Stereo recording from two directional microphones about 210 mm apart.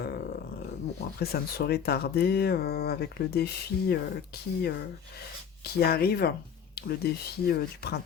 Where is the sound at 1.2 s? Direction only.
50° left (ahead or behind).